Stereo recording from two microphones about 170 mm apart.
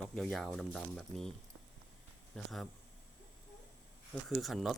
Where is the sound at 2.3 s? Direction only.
Centre (ahead or behind).